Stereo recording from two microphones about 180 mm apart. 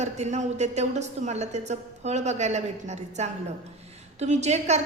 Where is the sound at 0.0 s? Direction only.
40° right (ahead or behind).